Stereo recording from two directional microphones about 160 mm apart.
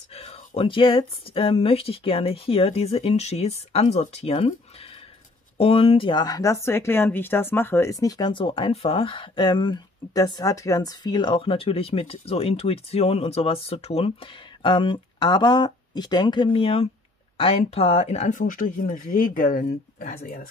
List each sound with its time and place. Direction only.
0.1 s speech: 40° left (ahead or behind)
5.6 s speech: 35° left (ahead or behind); by 20.4 s 60° left (ahead or behind)